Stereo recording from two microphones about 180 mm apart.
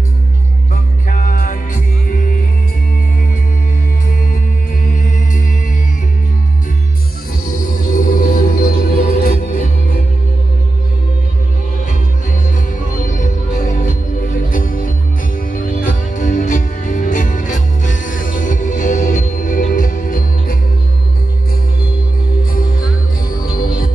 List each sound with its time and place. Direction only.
1.0 s music: 45° left (ahead or behind)
4.8 s music: 45° left (ahead or behind)
7.5 s music: 50° left (ahead or behind)
13.0 s music: 45° left (ahead or behind)
22.4 s music: 50° left (ahead or behind)